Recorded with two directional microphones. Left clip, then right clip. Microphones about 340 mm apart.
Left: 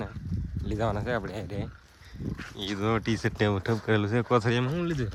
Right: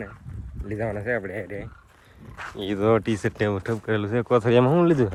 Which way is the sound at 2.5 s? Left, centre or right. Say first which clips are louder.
Right 8 dB; centre.